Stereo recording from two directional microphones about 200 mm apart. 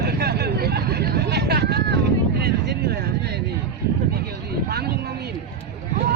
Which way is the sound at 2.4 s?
55° right (ahead or behind).